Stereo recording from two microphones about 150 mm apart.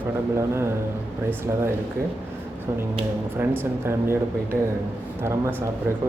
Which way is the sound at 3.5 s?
15° right (ahead or behind).